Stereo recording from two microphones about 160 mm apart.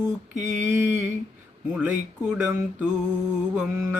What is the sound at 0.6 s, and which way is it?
Speech, 15° right (ahead or behind).